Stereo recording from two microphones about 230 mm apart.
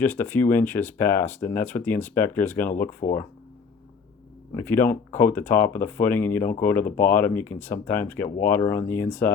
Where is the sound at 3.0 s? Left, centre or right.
Left.